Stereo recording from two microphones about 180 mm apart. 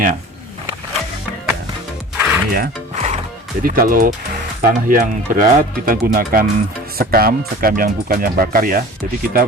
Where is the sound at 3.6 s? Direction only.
55° right (ahead or behind).